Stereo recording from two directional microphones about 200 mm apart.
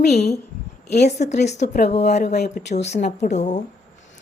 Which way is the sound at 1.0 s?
35° left (ahead or behind).